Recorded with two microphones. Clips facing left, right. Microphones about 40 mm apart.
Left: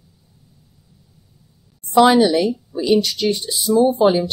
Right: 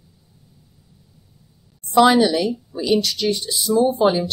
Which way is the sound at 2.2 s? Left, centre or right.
Centre.